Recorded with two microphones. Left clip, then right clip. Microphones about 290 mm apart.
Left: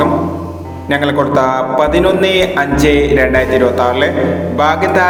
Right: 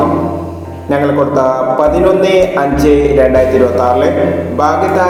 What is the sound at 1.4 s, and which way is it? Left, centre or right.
Mantra, left.